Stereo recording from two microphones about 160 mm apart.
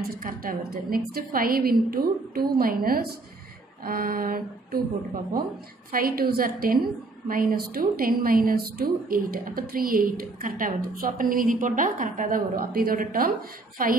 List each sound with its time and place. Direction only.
0.1 s a woman's voice: 65° right (ahead or behind)
5.9 s a woman's voice: 65° right (ahead or behind)